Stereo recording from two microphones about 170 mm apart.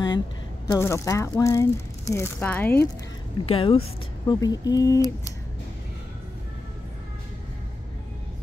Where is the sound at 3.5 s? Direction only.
35° left (ahead or behind).